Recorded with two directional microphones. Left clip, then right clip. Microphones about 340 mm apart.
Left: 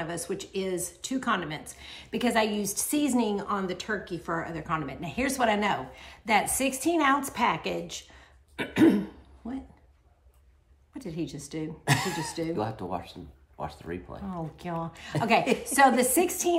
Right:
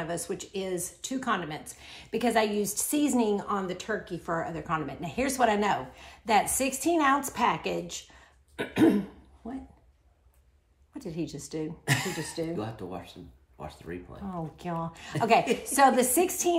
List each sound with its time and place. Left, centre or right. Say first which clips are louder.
0.0 s a woman's voice: even; centre
10.9 s a woman's voice: even; centre
11.8 s speech: left 3 dB; centre
12.3 s a woman's voice: left 1 dB; centre
12.5 s speech: left 5 dB; centre
14.2 s a woman's voice: even; centre